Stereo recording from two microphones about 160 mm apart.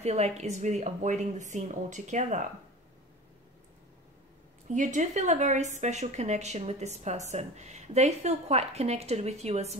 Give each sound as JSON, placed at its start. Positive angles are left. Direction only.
{"t": 0.0, "sound": "a woman's voice", "side_deg": -45}
{"t": 4.7, "sound": "a woman's voice", "side_deg": -50}